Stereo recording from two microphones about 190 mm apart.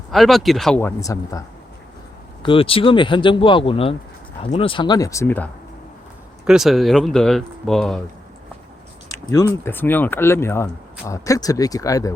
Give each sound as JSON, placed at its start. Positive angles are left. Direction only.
{"t": 0.1, "sound": "speech", "side_deg": 0}
{"t": 0.8, "sound": "speech", "side_deg": 15}
{"t": 2.4, "sound": "speech", "side_deg": 30}
{"t": 6.4, "sound": "speech", "side_deg": -5}
{"t": 9.6, "sound": "speech", "side_deg": 10}